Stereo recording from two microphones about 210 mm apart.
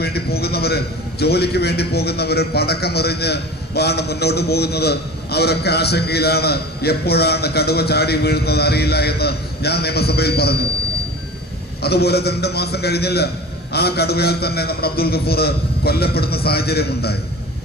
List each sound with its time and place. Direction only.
0.0 s a sound: 50° left (ahead or behind)
1.2 s a man's voice: 50° left (ahead or behind)
11.8 s a man's voice: 50° left (ahead or behind)